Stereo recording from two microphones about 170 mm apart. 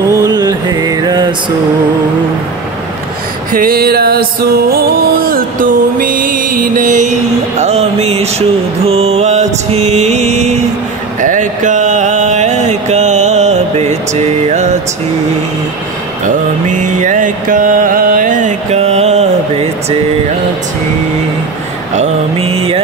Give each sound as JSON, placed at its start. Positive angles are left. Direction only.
{"t": 0.1, "sound": "mantra", "side_deg": -20}
{"t": 3.5, "sound": "music", "side_deg": -60}
{"t": 11.1, "sound": "mantra", "side_deg": -50}
{"t": 16.6, "sound": "mantra", "side_deg": -50}
{"t": 21.9, "sound": "mantra", "side_deg": -40}